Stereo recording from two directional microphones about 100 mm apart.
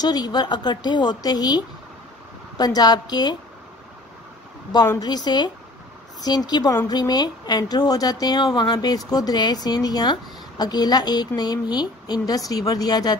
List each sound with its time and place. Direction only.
0.0 s speech: 45° left (ahead or behind)
5.0 s speech: 45° left (ahead or behind)